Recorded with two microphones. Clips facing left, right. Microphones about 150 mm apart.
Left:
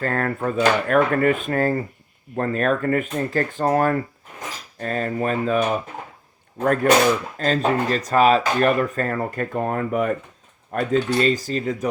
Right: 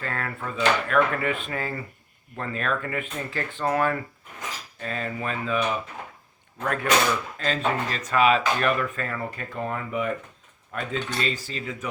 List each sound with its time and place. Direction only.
0.0 s speech: 45° left (ahead or behind)
6.8 s speech: 45° left (ahead or behind)